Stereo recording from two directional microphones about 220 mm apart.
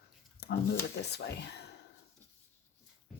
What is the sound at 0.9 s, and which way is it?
Speech, 50° left (ahead or behind).